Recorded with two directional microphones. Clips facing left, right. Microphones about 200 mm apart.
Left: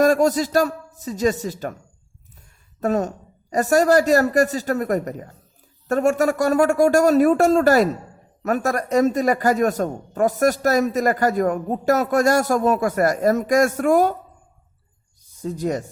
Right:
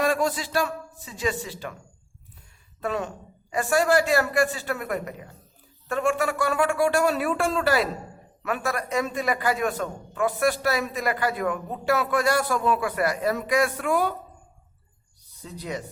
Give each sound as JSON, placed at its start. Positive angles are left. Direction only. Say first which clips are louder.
{"t": 0.0, "sound": "a man's voice", "louder": "left 8 dB", "side_deg": 45}
{"t": 2.8, "sound": "a man's voice", "louder": "left 7 dB", "side_deg": 45}
{"t": 15.2, "sound": "speech", "louder": "left 13 dB", "side_deg": 45}